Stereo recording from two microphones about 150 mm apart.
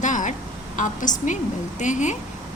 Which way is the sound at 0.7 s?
55° left (ahead or behind).